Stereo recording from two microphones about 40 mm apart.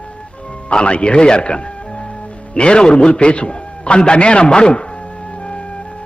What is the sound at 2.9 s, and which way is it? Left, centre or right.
Music, left.